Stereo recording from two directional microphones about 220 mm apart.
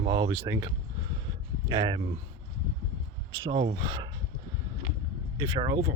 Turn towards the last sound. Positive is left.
turn(degrees=-20)  # may be behind; listen again after turning